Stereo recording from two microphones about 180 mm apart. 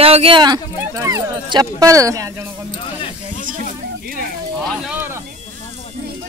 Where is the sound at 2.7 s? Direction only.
30° left (ahead or behind).